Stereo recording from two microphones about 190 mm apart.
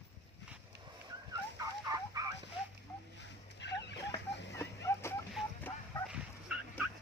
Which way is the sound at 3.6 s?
65° left (ahead or behind).